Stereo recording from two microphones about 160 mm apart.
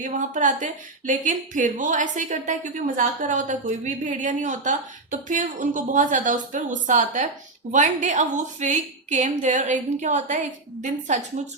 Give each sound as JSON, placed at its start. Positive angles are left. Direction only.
{"t": 0.0, "sound": "a woman's voice", "side_deg": -50}